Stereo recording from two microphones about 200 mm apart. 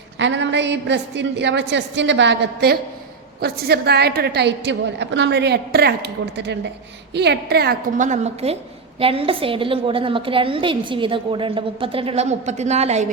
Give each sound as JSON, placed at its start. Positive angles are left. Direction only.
{"t": 0.2, "sound": "a woman's voice", "side_deg": -65}